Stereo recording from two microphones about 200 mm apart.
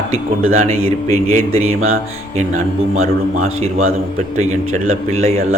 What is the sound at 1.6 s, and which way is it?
Speech, 90° right.